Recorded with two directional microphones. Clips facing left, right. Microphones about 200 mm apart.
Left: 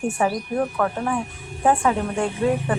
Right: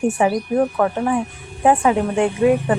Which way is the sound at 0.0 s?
15° right (ahead or behind).